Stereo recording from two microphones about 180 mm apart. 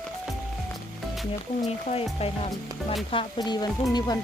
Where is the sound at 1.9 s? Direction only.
30° left (ahead or behind).